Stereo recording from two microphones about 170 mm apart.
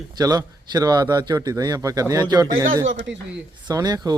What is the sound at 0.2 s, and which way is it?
Speech, 25° right (ahead or behind).